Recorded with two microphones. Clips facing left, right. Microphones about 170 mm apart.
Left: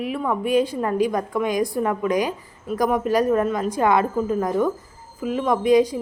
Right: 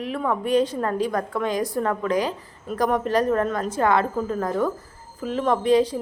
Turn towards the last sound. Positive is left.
turn(degrees=10)  # may be behind; listen again after turning